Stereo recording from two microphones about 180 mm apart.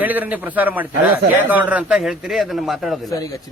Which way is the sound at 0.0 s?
10° right (ahead or behind).